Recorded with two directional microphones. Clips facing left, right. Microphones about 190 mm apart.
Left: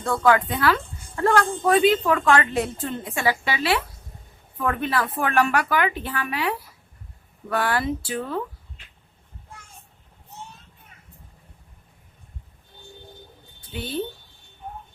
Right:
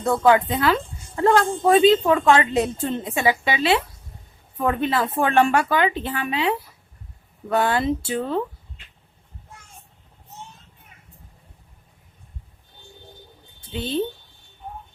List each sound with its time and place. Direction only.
0.0 s a woman's voice: 20° right (ahead or behind)
13.6 s a woman's voice: 25° right (ahead or behind)